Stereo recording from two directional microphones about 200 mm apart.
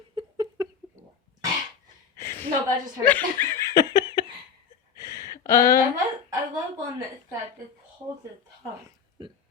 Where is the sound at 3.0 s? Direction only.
10° left (ahead or behind).